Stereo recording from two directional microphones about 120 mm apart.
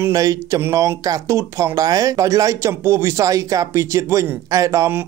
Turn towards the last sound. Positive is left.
turn(degrees=-25)  # may be behind; listen again after turning